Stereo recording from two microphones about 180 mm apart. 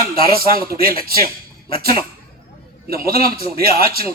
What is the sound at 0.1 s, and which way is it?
A man's voice, 55° right (ahead or behind).